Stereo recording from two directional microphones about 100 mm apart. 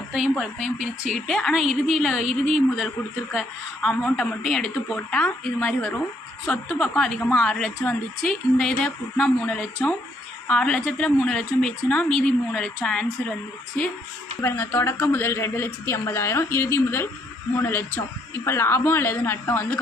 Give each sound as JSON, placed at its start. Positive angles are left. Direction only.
{"t": 0.1, "sound": "a woman's voice", "side_deg": -5}
{"t": 1.3, "sound": "a woman's voice", "side_deg": 5}
{"t": 14.4, "sound": "a woman's voice", "side_deg": 20}